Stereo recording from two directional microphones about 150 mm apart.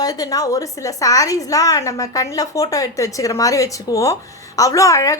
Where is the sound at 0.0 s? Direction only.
25° left (ahead or behind).